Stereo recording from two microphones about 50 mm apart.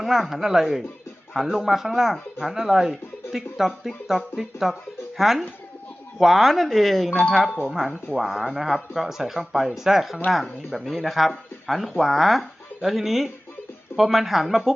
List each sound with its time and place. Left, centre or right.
0.0 s speech: centre
7.8 s speech: centre